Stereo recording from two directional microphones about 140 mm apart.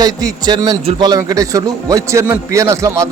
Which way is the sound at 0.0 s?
25° right (ahead or behind).